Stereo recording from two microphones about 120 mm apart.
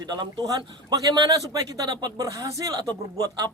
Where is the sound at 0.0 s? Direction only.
35° right (ahead or behind).